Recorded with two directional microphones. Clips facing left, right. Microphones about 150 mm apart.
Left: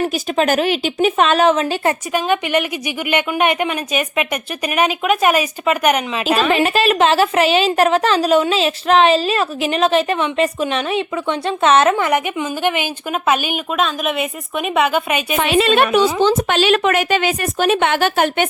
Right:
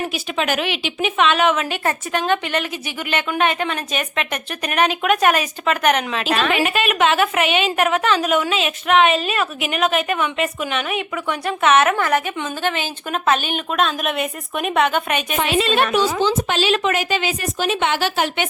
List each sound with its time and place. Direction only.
0.1 s a woman's voice: 40° left (ahead or behind)
2.1 s a woman's voice: 10° left (ahead or behind)
6.5 s a woman's voice: 35° left (ahead or behind)
11.9 s a woman's voice: 20° left (ahead or behind)
15.4 s a woman's voice: 65° left (ahead or behind)